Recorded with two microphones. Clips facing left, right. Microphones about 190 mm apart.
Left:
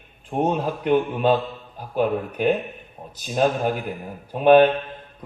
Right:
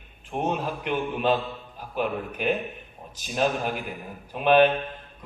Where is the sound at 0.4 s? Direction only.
40° left (ahead or behind).